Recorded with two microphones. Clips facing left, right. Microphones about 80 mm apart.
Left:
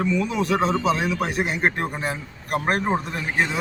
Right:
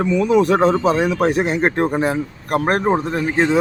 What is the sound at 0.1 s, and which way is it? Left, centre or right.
Speech, right.